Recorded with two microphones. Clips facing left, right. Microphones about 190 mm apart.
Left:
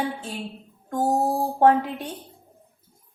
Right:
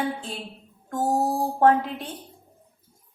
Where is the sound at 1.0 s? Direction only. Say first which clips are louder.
Left 1 dB; 25° left (ahead or behind).